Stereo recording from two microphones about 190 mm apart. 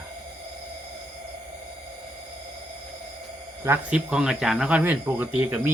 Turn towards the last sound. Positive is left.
turn(degrees=-10)  # may be behind; listen again after turning